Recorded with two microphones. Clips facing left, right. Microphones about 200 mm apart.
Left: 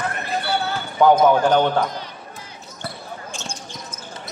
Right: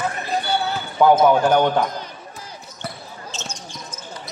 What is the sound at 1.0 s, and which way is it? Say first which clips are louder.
Speech: even; 5° right (ahead or behind).